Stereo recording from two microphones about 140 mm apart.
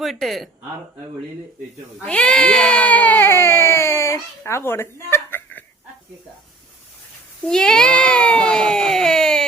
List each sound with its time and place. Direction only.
0.0 s speech: centre (ahead or behind)
2.0 s baby cry: 5° left (ahead or behind)
7.4 s speech: 5° left (ahead or behind)